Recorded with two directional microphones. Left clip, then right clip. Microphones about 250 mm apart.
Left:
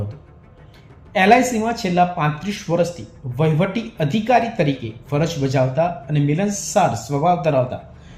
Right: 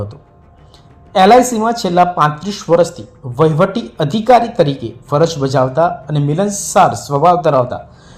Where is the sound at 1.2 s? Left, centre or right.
Centre.